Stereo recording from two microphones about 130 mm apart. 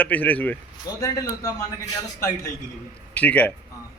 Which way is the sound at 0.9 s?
25° left (ahead or behind).